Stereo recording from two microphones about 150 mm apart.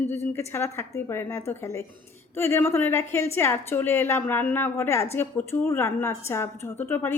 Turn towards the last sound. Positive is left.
turn(degrees=15)  # may be behind; listen again after turning